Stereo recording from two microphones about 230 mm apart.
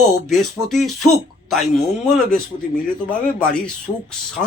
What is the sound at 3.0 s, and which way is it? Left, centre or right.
Speech, centre.